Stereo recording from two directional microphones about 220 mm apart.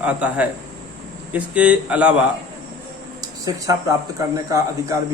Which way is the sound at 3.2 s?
15° right (ahead or behind).